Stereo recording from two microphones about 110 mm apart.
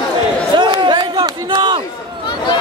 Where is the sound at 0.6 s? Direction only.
45° right (ahead or behind).